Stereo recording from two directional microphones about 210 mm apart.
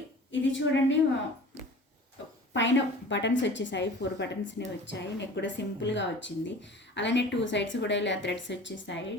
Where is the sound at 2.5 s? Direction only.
60° left (ahead or behind).